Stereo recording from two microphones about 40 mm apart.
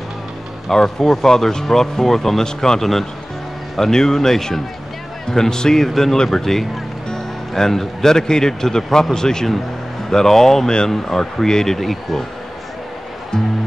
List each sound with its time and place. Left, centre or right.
0.7 s speech: centre
11.8 s speech: centre